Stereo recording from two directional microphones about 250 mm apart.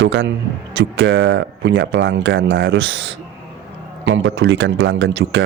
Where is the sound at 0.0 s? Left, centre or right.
Right.